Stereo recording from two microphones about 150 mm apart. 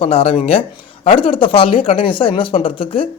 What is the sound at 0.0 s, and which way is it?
A man's voice, 40° left (ahead or behind).